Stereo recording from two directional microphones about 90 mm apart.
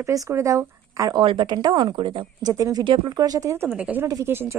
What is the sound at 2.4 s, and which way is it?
Speech, 45° right (ahead or behind).